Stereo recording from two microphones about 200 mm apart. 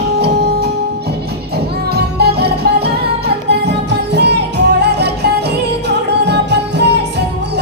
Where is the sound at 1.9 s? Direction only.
55° right (ahead or behind).